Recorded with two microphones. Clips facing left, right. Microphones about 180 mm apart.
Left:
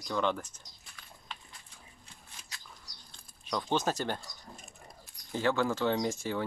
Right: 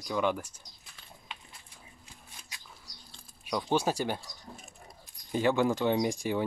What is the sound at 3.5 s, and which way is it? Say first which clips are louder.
Speech: right 2 dB; 10° right (ahead or behind).